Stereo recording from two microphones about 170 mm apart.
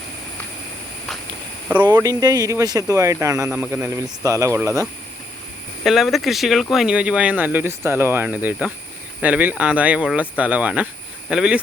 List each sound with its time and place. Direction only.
2.0 s speech: 20° right (ahead or behind)
3.5 s speech: 5° right (ahead or behind)
5.8 s speech: centre (ahead or behind)